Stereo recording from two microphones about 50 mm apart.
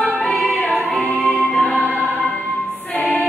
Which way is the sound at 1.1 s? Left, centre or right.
Left.